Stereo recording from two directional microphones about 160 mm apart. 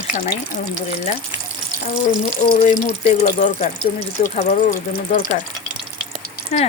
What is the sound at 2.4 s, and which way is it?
Speech, 55° left (ahead or behind).